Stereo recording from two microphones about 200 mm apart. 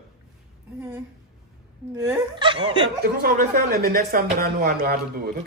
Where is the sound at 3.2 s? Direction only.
50° right (ahead or behind).